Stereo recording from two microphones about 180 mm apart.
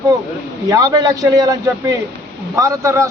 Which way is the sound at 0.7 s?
20° right (ahead or behind).